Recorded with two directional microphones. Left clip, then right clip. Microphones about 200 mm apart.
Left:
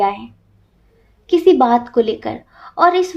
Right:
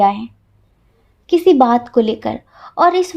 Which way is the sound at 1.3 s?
40° right (ahead or behind).